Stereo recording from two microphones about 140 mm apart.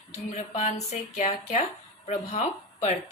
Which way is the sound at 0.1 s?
55° left (ahead or behind).